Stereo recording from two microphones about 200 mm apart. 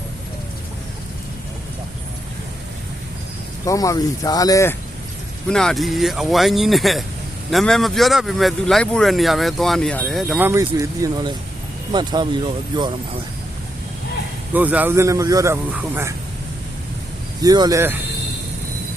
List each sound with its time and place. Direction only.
3.7 s speech: 15° left (ahead or behind)
5.5 s speech: 5° left (ahead or behind); by 12.9 s 25° right (ahead or behind)
14.5 s a man's voice: 10° right (ahead or behind)
17.4 s a man's voice: 20° right (ahead or behind)